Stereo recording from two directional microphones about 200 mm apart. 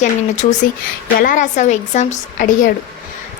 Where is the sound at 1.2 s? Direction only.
40° left (ahead or behind).